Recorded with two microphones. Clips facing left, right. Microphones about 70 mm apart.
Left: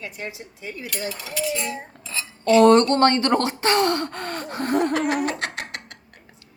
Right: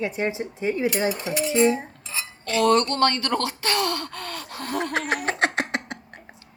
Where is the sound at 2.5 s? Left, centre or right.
Left.